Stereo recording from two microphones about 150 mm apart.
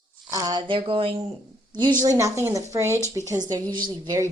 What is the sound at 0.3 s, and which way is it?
Speech, 25° right (ahead or behind).